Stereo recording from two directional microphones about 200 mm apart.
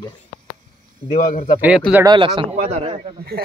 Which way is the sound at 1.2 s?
45° left (ahead or behind).